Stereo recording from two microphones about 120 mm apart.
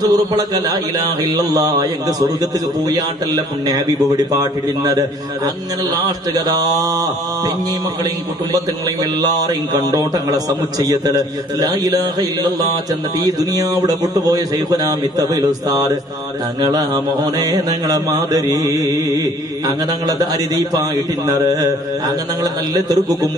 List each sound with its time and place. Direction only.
0.0 s mantra: 35° right (ahead or behind)
9.2 s mantra: 30° right (ahead or behind)